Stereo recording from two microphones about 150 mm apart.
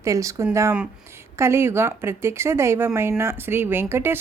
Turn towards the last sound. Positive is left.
turn(degrees=-15)  # may be behind; listen again after turning